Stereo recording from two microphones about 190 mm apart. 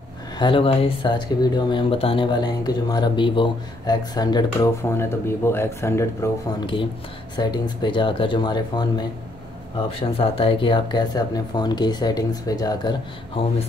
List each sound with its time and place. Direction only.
0.4 s speech: 25° left (ahead or behind)
6.6 s speech: 25° left (ahead or behind)